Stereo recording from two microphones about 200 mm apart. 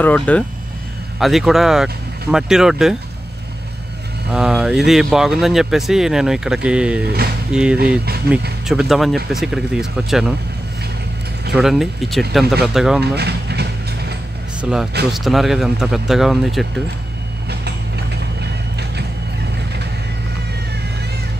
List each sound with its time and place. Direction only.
0.0 s speech: 5° left (ahead or behind)
4.3 s speech: 5° right (ahead or behind)
11.5 s speech: centre (ahead or behind)
13.0 s mechanisms: 55° right (ahead or behind)
14.6 s speech: 5° right (ahead or behind)
17.5 s vehicle: 55° right (ahead or behind)